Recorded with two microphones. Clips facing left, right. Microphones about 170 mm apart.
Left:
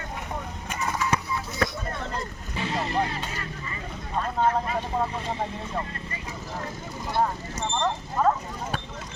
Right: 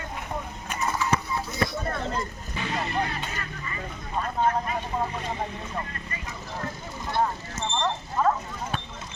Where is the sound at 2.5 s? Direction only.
30° left (ahead or behind).